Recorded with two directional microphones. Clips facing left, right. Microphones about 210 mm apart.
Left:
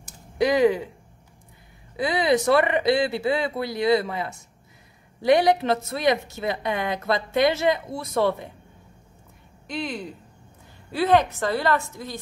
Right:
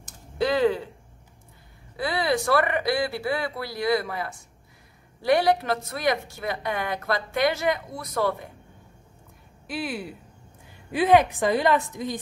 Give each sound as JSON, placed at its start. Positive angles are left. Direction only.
{"t": 0.0, "sound": "a sound", "side_deg": 15}
{"t": 2.0, "sound": "speech", "side_deg": 20}
{"t": 9.7, "sound": "a woman's voice", "side_deg": -5}